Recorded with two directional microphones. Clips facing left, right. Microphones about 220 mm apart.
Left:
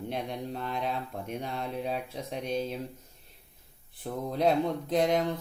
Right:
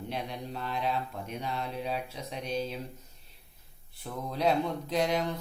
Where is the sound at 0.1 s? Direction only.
50° left (ahead or behind).